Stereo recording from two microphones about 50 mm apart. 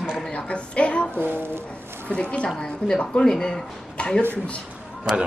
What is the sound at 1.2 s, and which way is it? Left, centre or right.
Speech, right.